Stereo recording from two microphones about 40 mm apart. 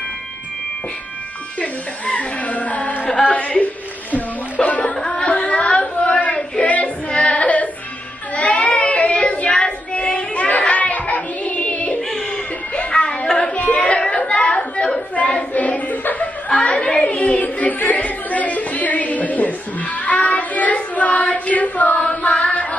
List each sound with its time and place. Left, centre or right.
1.6 s speech: left
4.9 s a sound: left
6.6 s female singing: left
8.4 s child singing: left
10.7 s hands: left
12.7 s music: left
13.8 s chatter: left
15.1 s a sound: left
16.4 s a sound: left